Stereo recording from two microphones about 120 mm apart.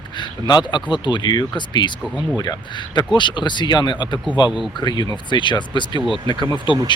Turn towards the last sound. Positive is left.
turn(degrees=40)  # may be behind; listen again after turning